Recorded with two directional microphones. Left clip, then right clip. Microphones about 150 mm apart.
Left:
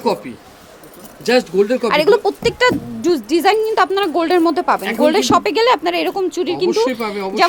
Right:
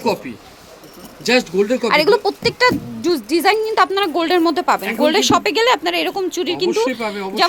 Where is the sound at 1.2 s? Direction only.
20° left (ahead or behind).